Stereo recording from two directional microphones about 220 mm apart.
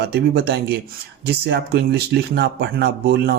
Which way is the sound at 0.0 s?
45° right (ahead or behind).